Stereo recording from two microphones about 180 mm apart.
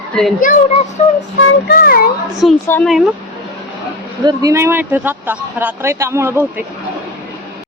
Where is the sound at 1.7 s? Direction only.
55° left (ahead or behind).